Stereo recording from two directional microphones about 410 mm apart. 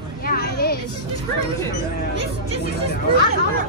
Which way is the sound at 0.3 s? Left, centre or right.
Left.